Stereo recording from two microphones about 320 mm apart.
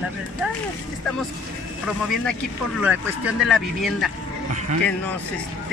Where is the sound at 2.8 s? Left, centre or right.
Centre.